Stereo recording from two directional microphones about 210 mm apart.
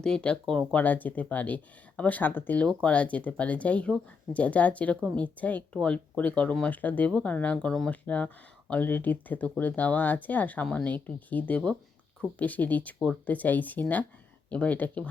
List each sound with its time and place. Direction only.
0.0 s speech: 5° left (ahead or behind)